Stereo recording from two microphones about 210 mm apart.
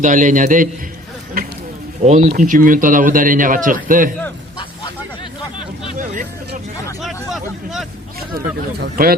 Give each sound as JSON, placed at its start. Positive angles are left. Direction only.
{"t": 0.0, "sound": "speech", "side_deg": -40}
{"t": 2.0, "sound": "speech", "side_deg": -35}
{"t": 6.0, "sound": "vehicle", "side_deg": -40}
{"t": 7.0, "sound": "vehicle", "side_deg": 0}
{"t": 8.4, "sound": "speech", "side_deg": -45}